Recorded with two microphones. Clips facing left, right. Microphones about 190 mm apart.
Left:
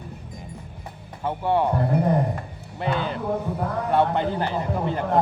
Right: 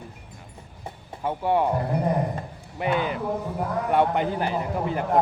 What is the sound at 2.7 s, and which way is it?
Speech, 10° right (ahead or behind).